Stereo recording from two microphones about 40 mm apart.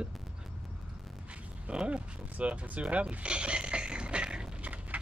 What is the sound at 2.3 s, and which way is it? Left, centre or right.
Speech, right.